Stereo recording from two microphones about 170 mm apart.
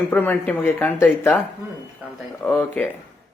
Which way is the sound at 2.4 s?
10° left (ahead or behind).